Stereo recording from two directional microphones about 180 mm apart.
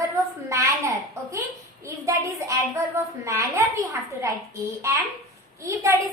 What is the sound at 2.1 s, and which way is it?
A woman's voice, 15° right (ahead or behind).